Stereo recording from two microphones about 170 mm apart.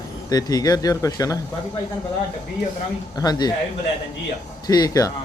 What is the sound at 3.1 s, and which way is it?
Speech, 25° left (ahead or behind).